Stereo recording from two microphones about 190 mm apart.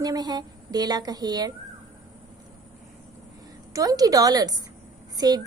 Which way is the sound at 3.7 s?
20° right (ahead or behind).